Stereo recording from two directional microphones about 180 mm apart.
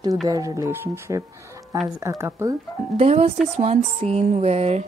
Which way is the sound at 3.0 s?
35° right (ahead or behind).